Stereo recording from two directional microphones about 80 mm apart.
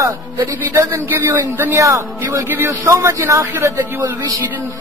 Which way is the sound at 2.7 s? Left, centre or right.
Right.